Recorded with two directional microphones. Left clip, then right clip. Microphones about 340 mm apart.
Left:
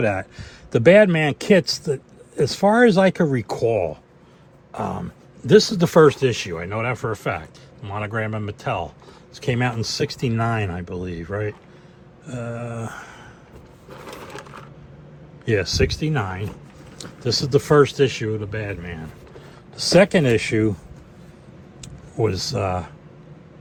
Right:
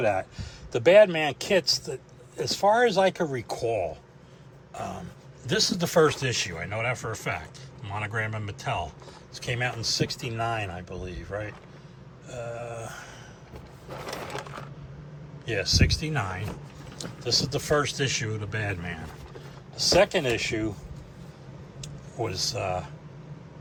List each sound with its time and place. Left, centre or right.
0.0 s a man's voice: left
4.7 s a sound: centre
5.5 s speech: centre
12.2 s mantra: centre
12.9 s speech: centre
14.0 s sewing machine: centre
15.4 s speech: centre
17.2 s speech: centre
19.7 s a man's voice: left
22.3 s speech: centre